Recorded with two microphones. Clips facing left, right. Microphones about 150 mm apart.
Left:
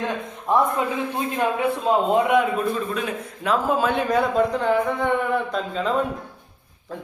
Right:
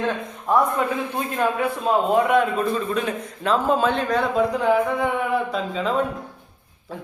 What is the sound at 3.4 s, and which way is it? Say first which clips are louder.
A man's voice: right 1 dB; 10° left (ahead or behind).